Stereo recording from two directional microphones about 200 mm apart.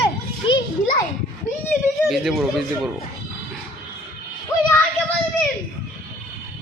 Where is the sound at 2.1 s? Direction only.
Centre (ahead or behind).